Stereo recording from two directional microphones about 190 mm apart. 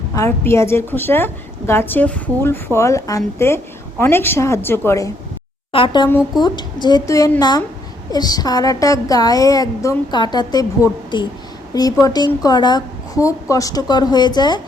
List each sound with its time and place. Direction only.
0.1 s a woman's voice: 15° left (ahead or behind)
5.7 s a woman's voice: 25° left (ahead or behind)